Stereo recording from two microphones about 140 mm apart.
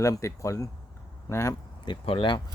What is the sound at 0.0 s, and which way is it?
A man's voice, 20° left (ahead or behind).